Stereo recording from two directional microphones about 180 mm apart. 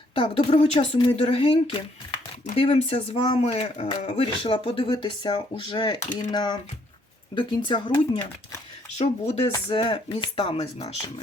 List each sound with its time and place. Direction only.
0.1 s speech: 30° left (ahead or behind)
9.0 s speech: 35° left (ahead or behind)
9.5 s speech: 25° left (ahead or behind)